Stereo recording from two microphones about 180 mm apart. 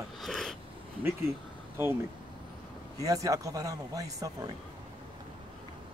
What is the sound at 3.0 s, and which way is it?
A man's voice, 20° right (ahead or behind).